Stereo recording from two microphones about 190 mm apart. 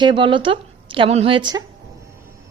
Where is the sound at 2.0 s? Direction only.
15° right (ahead or behind).